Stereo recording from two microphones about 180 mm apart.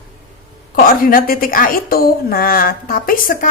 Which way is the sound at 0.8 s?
55° left (ahead or behind).